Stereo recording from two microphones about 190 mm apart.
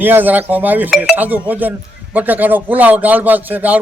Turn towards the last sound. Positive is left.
turn(degrees=-10)  # may be behind; listen again after turning